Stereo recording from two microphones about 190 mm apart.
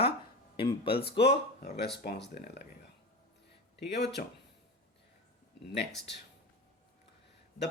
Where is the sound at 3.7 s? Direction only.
60° left (ahead or behind).